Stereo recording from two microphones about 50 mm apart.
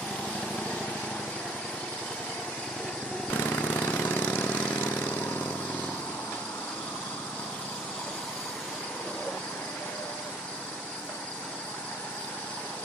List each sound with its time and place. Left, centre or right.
3.3 s vehicle: left